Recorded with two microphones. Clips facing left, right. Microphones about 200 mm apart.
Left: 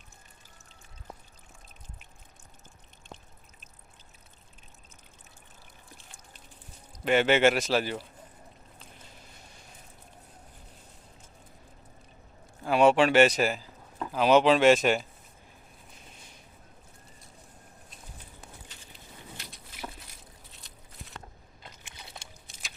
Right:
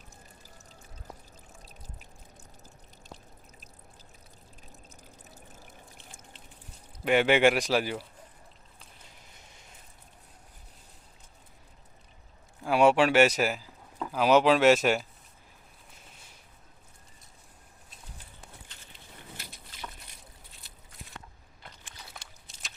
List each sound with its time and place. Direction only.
7.0 s speech: 10° right (ahead or behind)
12.6 s speech: 10° right (ahead or behind)
21.6 s biting: 20° left (ahead or behind)